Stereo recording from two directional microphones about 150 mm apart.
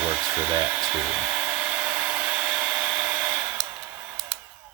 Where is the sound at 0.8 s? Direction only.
20° right (ahead or behind).